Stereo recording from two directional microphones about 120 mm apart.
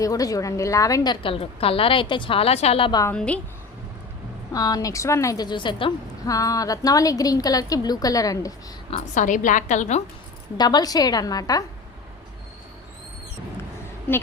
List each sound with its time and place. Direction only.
0.0 s a woman's voice: 30° left (ahead or behind); by 2.9 s 55° left (ahead or behind)
3.1 s a woman's voice: 10° left (ahead or behind)
4.5 s a woman's voice: 30° left (ahead or behind)
6.2 s a woman's voice: 30° left (ahead or behind)
8.9 s a woman's voice: 90° left
10.6 s a woman's voice: 35° left (ahead or behind)